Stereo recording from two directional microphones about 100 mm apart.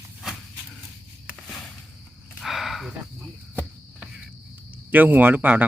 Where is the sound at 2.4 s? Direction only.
Centre (ahead or behind).